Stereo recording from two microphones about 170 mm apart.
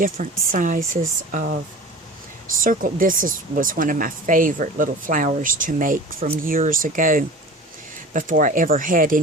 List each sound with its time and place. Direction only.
0.0 s speech: 50° right (ahead or behind)
2.6 s speech: 55° right (ahead or behind)